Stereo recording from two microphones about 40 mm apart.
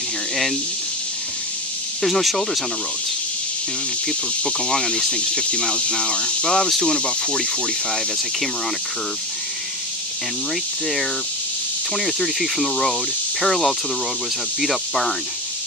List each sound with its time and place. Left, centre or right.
2.0 s speech: centre
4.5 s speech: centre
12.0 s speech: centre